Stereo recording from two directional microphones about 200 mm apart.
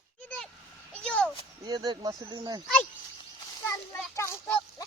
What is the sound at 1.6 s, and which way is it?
Speech, 20° right (ahead or behind).